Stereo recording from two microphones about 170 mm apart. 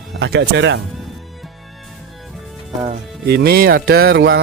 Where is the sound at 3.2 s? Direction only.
70° right (ahead or behind); by 4.4 s 90° right.